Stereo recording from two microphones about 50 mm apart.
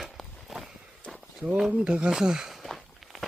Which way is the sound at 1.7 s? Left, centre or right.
Right.